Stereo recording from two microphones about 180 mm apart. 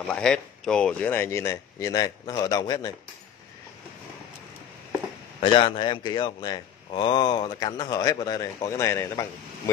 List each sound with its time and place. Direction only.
0.0 s speech: 5° left (ahead or behind); by 2.9 s 20° left (ahead or behind)
5.4 s speech: 30° left (ahead or behind)